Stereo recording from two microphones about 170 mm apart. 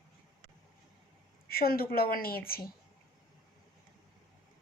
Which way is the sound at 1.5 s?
60° left (ahead or behind).